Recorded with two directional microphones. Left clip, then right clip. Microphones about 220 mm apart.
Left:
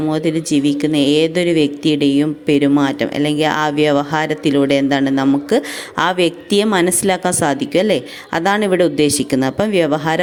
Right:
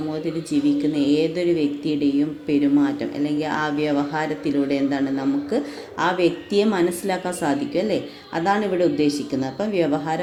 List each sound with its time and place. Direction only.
0.1 s speech: 30° left (ahead or behind)